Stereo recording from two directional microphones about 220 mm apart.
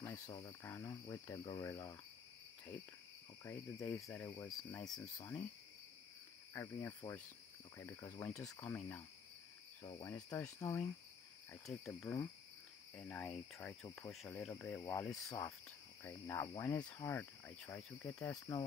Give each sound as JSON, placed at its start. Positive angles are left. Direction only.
{"t": 0.0, "sound": "speech", "side_deg": 20}
{"t": 3.4, "sound": "speech", "side_deg": 10}
{"t": 6.5, "sound": "speech", "side_deg": 10}
{"t": 9.8, "sound": "speech", "side_deg": 20}
{"t": 11.5, "sound": "speech", "side_deg": 0}